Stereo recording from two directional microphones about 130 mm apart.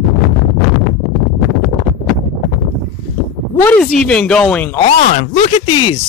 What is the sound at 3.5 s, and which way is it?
A woman's voice, 10° left (ahead or behind).